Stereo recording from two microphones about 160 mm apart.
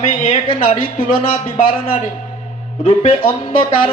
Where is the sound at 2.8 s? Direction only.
35° left (ahead or behind).